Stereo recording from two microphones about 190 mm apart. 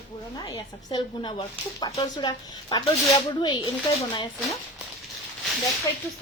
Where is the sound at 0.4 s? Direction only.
20° left (ahead or behind).